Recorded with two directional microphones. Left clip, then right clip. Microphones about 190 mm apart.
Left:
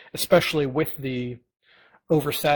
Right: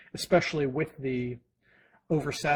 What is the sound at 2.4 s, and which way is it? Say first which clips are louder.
Speech: left 5 dB; 35° left (ahead or behind).